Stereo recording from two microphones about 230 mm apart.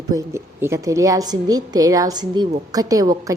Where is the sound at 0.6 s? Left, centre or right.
Centre.